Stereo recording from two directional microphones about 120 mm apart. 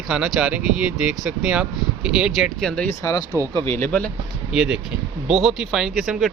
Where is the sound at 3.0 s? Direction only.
25° left (ahead or behind).